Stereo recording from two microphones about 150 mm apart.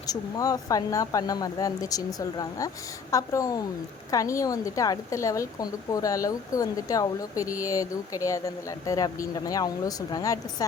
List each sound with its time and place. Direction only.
0.1 s a woman's voice: 25° left (ahead or behind)